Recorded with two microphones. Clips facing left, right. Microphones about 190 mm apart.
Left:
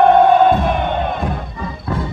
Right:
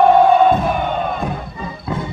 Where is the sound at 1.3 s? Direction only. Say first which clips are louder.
Left 1 dB; 20° right (ahead or behind).